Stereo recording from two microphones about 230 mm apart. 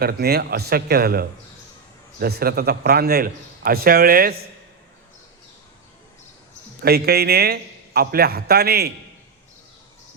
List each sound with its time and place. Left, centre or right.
0.0 s a man's voice: right
6.8 s a man's voice: right